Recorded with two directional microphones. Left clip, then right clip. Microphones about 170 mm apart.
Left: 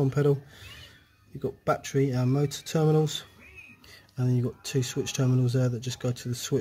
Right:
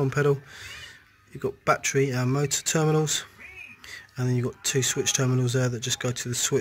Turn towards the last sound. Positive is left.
turn(degrees=0)  # may be behind; listen again after turning